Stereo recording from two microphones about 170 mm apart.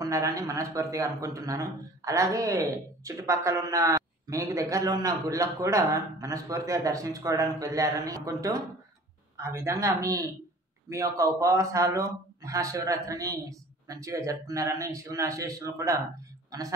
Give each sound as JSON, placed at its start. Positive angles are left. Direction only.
{"t": 0.0, "sound": "speech", "side_deg": -20}